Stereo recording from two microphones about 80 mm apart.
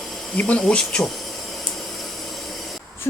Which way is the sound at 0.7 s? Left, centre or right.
Centre.